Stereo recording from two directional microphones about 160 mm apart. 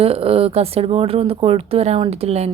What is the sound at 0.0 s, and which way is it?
A woman's voice, 35° right (ahead or behind).